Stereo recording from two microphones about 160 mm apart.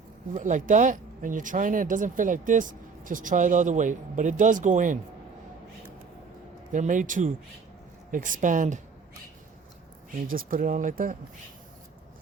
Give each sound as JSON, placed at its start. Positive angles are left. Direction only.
{"t": 0.3, "sound": "speech", "side_deg": -55}
{"t": 6.7, "sound": "speech", "side_deg": -50}
{"t": 10.3, "sound": "speech", "side_deg": -60}